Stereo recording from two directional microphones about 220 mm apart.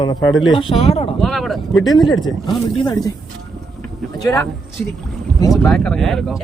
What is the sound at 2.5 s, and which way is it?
Speech, 20° left (ahead or behind).